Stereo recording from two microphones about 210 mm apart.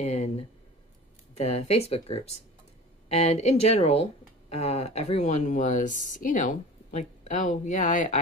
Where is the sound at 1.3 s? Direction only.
30° left (ahead or behind).